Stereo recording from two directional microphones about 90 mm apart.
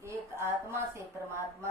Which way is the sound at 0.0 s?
30° right (ahead or behind).